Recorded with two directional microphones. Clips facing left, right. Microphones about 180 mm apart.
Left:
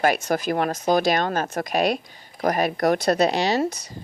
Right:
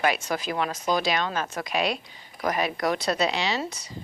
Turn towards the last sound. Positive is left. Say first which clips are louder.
# left 7 dB
turn(degrees=40)  # may be behind; listen again after turning